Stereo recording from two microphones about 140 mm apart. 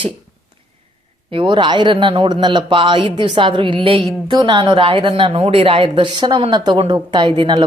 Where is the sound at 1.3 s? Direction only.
35° right (ahead or behind).